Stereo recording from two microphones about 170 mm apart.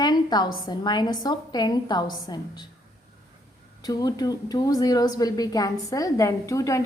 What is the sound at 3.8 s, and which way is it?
A woman's voice, 20° left (ahead or behind).